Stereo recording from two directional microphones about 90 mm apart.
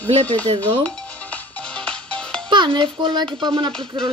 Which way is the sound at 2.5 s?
60° right (ahead or behind).